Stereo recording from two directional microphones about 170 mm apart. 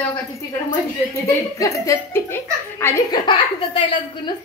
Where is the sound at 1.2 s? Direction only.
20° left (ahead or behind).